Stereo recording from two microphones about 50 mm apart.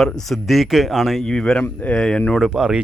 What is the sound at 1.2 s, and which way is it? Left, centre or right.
Speech, centre.